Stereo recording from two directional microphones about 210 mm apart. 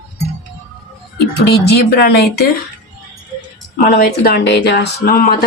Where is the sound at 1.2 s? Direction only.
50° left (ahead or behind).